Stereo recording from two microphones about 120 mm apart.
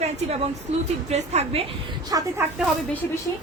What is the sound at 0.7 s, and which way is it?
Speech, 60° right (ahead or behind).